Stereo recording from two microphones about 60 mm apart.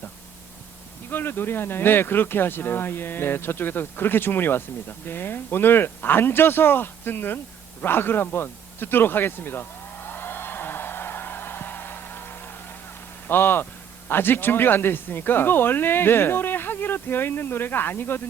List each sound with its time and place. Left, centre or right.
1.1 s speech: left
7.8 s a sound: left
13.2 s speech: left